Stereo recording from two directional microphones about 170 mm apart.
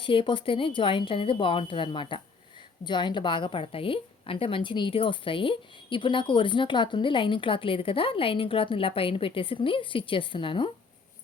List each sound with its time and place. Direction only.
0.0 s a woman's voice: 30° left (ahead or behind)